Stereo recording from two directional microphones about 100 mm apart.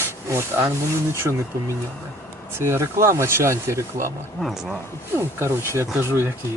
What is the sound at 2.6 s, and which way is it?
Speech, 25° right (ahead or behind).